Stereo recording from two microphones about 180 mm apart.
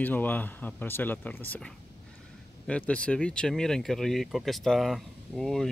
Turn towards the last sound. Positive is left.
turn(degrees=0)  # may be behind; listen again after turning